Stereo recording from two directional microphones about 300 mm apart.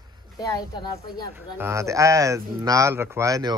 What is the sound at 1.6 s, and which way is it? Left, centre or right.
A man's voice, centre.